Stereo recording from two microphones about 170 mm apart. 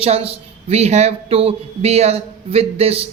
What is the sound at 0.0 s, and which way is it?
A woman's voice, 35° right (ahead or behind).